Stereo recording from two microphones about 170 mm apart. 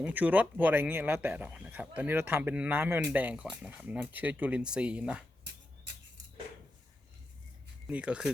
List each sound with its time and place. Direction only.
0.0 s speech: 10° right (ahead or behind)
5.5 s a sound: 90° right
7.9 s speech: 5° right (ahead or behind)